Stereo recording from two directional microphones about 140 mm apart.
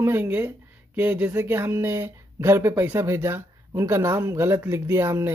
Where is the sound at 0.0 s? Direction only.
15° right (ahead or behind).